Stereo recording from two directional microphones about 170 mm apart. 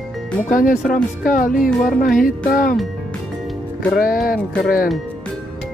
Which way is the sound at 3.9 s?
55° left (ahead or behind).